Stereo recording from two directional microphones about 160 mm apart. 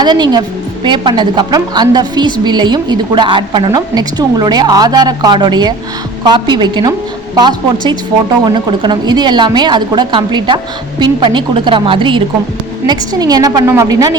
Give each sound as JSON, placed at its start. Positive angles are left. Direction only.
{"t": 0.0, "sound": "a woman's voice", "side_deg": -25}